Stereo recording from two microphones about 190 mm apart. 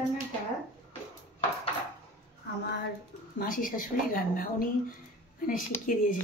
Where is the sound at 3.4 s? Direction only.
45° left (ahead or behind).